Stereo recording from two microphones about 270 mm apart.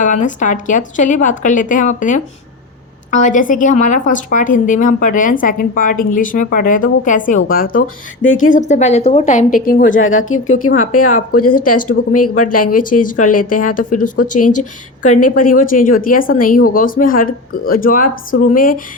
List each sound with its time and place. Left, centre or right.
0.0 s a woman's voice: left
10.0 s a woman's voice: left
10.8 s a woman's voice: left
14.3 s speech: left
14.6 s speech: left